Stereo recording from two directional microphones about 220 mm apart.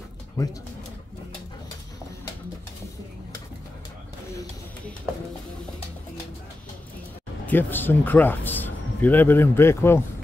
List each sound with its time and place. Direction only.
7.4 s a man's voice: 10° left (ahead or behind)